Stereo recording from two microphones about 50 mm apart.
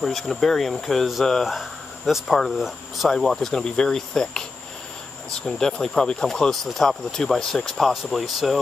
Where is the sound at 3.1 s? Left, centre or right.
Centre.